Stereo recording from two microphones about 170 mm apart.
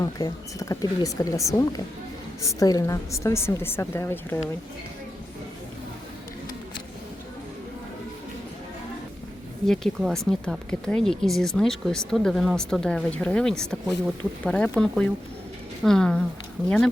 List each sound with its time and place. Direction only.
0.0 s a woman's voice: 20° left (ahead or behind)
9.6 s a woman's voice: centre (ahead or behind)